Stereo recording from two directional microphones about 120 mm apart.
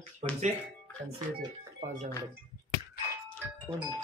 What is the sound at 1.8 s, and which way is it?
Speech, 80° right.